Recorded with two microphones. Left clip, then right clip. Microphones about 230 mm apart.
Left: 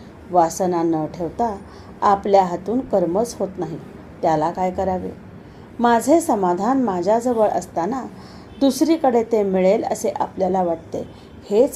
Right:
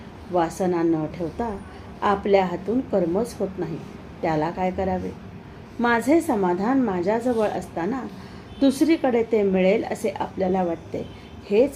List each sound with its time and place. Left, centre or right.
0.3 s a woman's voice: centre